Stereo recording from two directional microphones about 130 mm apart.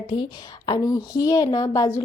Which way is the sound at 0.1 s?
35° left (ahead or behind).